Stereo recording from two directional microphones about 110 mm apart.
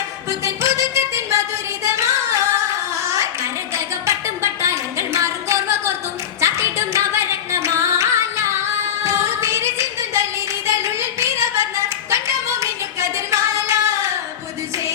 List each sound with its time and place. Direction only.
0.4 s music: 25° right (ahead or behind)
1.8 s singing: 25° right (ahead or behind)
4.6 s a sound: 25° right (ahead or behind)
6.4 s singing: 25° right (ahead or behind)
9.0 s music: 25° right (ahead or behind)
11.2 s a sound: 25° right (ahead or behind)
12.1 s singing: 25° right (ahead or behind)